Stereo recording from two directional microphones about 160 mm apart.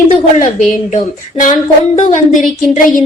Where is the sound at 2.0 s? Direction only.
50° left (ahead or behind).